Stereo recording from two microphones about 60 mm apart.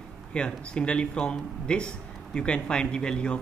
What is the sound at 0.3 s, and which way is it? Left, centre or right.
Speech, centre.